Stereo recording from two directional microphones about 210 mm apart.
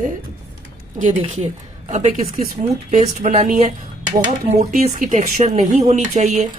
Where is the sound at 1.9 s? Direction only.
40° right (ahead or behind).